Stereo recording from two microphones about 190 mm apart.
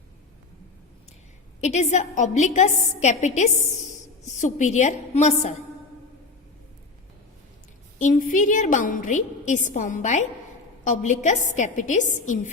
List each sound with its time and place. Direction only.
1.6 s a woman's voice: 35° left (ahead or behind)
7.9 s a woman's voice: 45° left (ahead or behind)